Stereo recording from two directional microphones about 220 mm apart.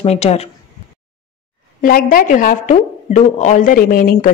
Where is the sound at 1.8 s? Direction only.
40° left (ahead or behind).